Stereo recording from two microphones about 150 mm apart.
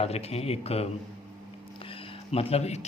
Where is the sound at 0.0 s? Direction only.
45° left (ahead or behind).